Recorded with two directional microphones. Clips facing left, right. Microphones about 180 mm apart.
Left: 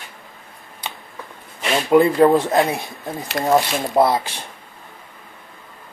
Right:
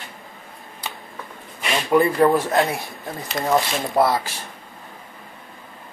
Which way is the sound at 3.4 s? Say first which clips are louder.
Left 3 dB; 50° left (ahead or behind).